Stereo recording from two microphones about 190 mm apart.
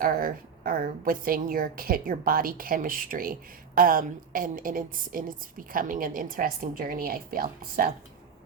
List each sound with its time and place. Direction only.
0.0 s a woman's voice: 50° right (ahead or behind)